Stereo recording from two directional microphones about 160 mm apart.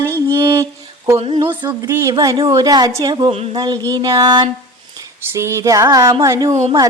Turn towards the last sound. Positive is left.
turn(degrees=-20)  # may be behind; listen again after turning